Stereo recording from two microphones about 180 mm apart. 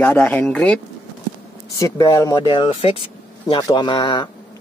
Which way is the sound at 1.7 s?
20° left (ahead or behind).